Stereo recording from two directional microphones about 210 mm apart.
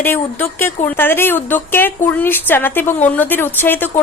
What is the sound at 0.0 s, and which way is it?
A woman's voice, 10° left (ahead or behind).